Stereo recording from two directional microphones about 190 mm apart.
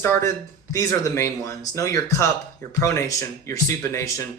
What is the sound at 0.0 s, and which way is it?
Speech, 10° left (ahead or behind).